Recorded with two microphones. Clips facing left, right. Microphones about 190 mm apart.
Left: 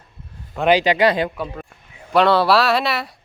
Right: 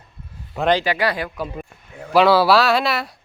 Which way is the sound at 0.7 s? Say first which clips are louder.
Left 4 dB; 15° left (ahead or behind).